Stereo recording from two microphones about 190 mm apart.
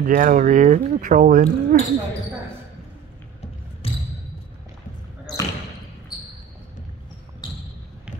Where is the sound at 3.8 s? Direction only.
30° left (ahead or behind).